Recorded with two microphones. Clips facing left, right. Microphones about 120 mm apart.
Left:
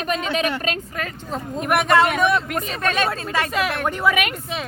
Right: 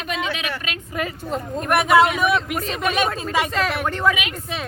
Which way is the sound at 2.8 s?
10° right (ahead or behind).